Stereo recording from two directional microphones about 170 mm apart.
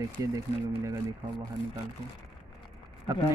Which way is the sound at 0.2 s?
15° right (ahead or behind).